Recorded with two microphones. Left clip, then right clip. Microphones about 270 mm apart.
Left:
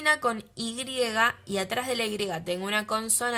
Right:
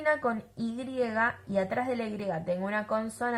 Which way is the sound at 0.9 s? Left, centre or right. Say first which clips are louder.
Left 4 dB; left.